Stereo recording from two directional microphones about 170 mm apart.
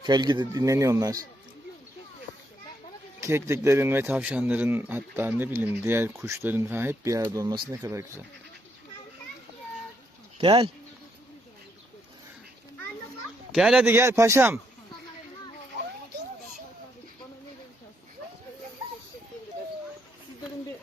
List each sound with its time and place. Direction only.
0.0 s speech: 25° right (ahead or behind)
3.2 s a man's voice: 15° right (ahead or behind)
10.3 s speech: 30° right (ahead or behind)
13.5 s a man's voice: centre (ahead or behind)